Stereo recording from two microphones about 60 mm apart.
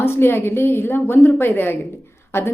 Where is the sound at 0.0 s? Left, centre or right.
Left.